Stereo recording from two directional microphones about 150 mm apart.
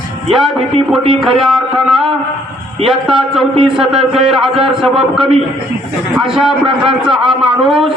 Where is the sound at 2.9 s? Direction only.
Centre (ahead or behind).